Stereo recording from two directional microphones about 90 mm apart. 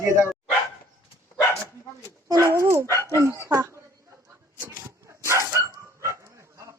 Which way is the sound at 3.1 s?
35° right (ahead or behind).